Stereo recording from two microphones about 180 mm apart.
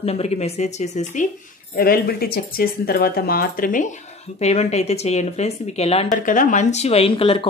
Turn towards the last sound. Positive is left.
turn(degrees=30)  # may be behind; listen again after turning